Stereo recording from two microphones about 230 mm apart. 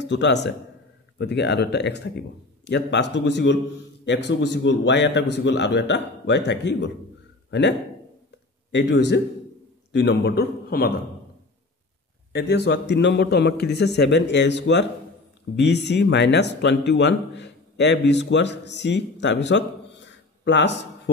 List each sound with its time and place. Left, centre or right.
0.0 s a man's voice: left
8.7 s a man's voice: left
12.3 s a man's voice: left